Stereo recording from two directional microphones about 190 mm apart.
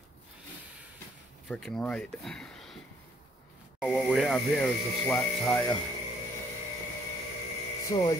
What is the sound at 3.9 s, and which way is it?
Speech, 5° left (ahead or behind).